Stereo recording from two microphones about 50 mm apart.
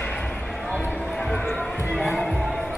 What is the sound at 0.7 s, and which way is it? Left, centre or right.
Music, centre.